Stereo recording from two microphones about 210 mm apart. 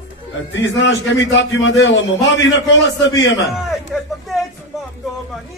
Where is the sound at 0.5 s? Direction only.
60° left (ahead or behind).